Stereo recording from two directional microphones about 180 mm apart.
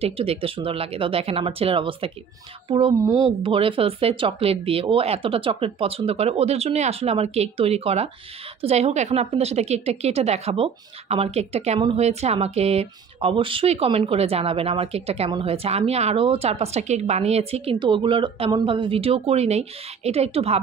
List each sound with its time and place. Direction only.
0.0 s a woman's voice: 35° right (ahead or behind)